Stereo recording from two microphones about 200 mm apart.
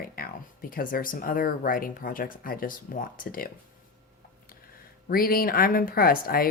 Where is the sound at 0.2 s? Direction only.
45° left (ahead or behind).